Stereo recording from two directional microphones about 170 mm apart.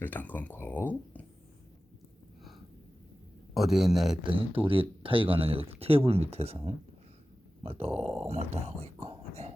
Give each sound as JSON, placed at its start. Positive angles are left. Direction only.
{"t": 0.0, "sound": "speech", "side_deg": 10}
{"t": 3.5, "sound": "a man's voice", "side_deg": 0}
{"t": 4.2, "sound": "speech", "side_deg": -30}